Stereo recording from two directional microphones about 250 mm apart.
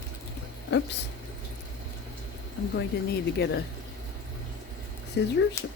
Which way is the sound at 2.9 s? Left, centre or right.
Left.